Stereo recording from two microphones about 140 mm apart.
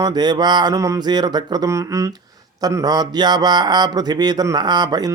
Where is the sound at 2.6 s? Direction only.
25° right (ahead or behind).